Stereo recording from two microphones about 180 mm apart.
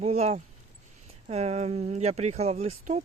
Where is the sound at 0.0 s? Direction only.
35° right (ahead or behind).